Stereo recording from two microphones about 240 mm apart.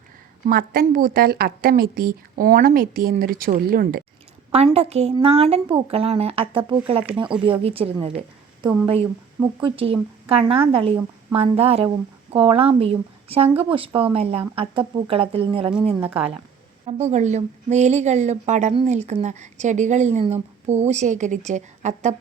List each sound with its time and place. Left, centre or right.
0.4 s a woman's voice: right
4.5 s a woman's voice: right
16.0 s a woman's voice: centre
16.8 s a woman's voice: right